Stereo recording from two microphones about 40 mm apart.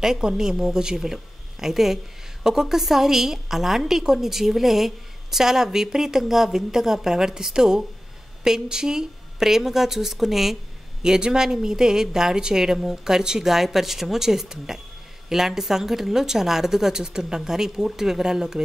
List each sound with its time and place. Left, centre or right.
0.0 s a woman's voice: centre
11.0 s a woman's voice: centre